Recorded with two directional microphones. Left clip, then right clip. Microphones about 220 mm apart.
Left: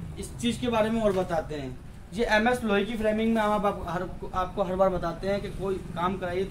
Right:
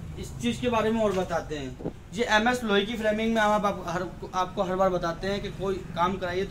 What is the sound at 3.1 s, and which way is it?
A man's voice, centre (ahead or behind).